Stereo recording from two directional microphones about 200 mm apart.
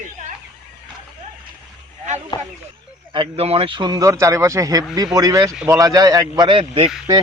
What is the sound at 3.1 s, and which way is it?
Speech, 25° right (ahead or behind).